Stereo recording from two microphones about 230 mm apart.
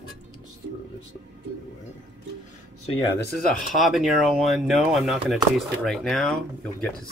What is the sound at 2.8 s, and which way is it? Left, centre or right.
Speech, left.